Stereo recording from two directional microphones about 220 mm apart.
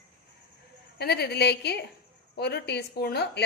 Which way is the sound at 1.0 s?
45° left (ahead or behind).